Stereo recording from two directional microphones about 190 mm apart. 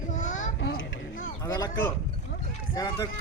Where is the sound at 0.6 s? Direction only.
65° left (ahead or behind).